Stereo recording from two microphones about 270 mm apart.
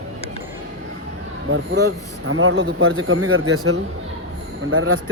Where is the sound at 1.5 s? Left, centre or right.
Right.